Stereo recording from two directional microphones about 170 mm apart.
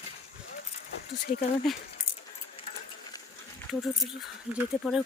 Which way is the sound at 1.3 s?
45° left (ahead or behind).